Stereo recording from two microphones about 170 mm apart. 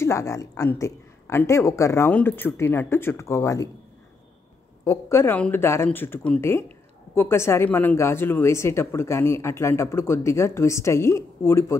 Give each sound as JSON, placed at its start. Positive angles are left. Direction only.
{"t": 0.0, "sound": "speech", "side_deg": 15}
{"t": 4.8, "sound": "speech", "side_deg": 15}